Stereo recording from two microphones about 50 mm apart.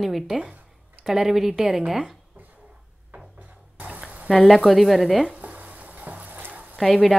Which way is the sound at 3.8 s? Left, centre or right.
Right.